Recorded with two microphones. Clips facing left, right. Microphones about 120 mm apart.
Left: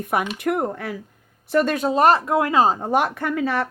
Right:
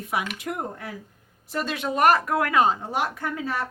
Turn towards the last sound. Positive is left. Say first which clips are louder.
# left 6 dB
turn(degrees=70)  # may be behind; listen again after turning